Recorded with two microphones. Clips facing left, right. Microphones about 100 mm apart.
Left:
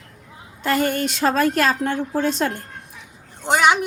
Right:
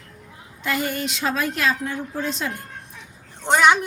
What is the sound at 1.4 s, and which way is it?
Speech, 50° left (ahead or behind).